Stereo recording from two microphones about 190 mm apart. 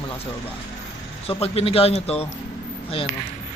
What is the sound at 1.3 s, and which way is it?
A man's voice, 30° left (ahead or behind).